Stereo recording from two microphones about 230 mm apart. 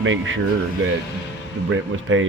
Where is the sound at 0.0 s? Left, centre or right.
Right.